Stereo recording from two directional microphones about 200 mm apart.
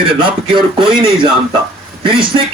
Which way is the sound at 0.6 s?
25° right (ahead or behind).